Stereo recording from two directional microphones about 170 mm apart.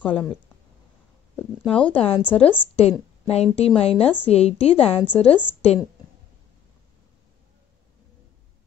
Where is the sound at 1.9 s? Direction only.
35° left (ahead or behind).